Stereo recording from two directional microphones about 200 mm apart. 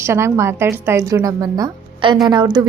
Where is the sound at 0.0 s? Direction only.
15° right (ahead or behind).